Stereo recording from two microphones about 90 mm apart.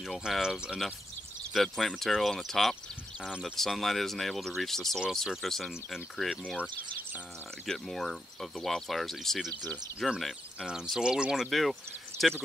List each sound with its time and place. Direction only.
0.0 s speech: 5° right (ahead or behind)
1.5 s speech: 5° left (ahead or behind)
6.5 s speech: 15° right (ahead or behind)
7.6 s speech: 5° left (ahead or behind)